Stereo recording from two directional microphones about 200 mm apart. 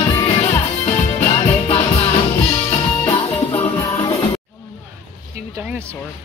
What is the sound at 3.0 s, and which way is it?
Music, 25° left (ahead or behind).